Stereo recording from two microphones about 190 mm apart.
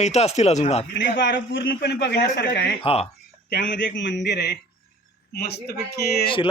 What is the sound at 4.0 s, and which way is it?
A man's voice, 65° left (ahead or behind).